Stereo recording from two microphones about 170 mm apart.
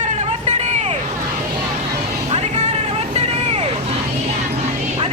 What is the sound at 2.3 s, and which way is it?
Vehicle, 40° right (ahead or behind).